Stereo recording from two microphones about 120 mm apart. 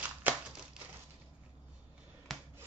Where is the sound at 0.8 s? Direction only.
5° right (ahead or behind).